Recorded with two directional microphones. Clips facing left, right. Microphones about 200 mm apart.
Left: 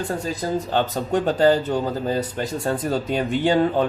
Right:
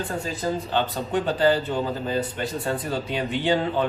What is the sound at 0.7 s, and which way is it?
Speech, 45° left (ahead or behind).